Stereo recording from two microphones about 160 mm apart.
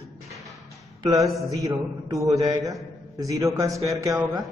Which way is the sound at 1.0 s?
20° right (ahead or behind).